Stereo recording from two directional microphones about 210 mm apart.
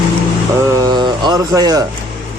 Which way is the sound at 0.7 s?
20° right (ahead or behind).